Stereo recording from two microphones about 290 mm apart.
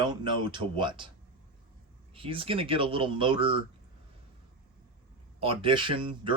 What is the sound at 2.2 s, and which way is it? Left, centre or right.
Speech, centre.